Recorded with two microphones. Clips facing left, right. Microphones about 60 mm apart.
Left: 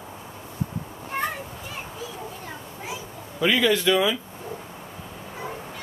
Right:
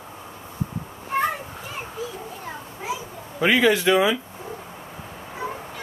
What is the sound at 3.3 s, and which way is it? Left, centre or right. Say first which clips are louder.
Speech: right 3 dB; right.